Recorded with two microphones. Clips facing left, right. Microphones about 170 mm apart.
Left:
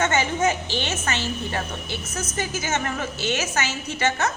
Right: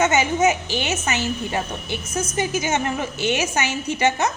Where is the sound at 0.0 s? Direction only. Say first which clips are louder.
Right 4 dB; 10° right (ahead or behind).